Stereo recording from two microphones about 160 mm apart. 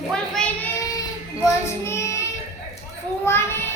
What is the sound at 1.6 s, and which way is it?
Child singing, 15° left (ahead or behind).